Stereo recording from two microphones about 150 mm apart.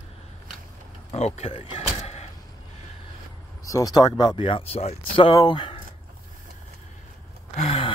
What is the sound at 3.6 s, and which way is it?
Speech, 25° left (ahead or behind).